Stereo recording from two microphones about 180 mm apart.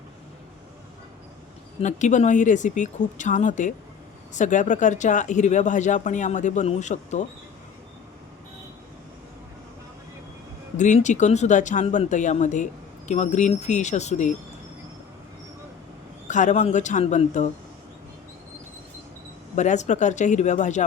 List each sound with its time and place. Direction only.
1.8 s speech: 40° left (ahead or behind)
10.8 s speech: 40° left (ahead or behind)
16.2 s speech: 40° left (ahead or behind)
19.5 s speech: 40° left (ahead or behind)